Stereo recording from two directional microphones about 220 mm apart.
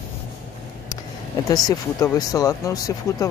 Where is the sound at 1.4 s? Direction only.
15° left (ahead or behind).